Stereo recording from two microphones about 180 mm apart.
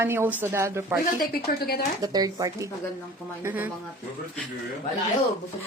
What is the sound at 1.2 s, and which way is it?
Speech, 55° left (ahead or behind).